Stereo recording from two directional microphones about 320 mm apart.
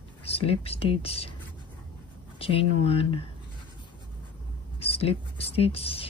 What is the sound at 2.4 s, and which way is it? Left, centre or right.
Speech, centre.